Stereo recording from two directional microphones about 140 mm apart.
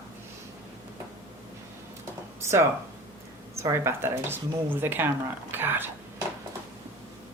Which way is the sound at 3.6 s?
20° right (ahead or behind).